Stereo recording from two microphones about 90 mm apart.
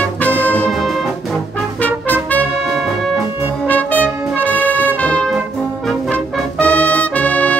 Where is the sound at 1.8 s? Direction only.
20° left (ahead or behind).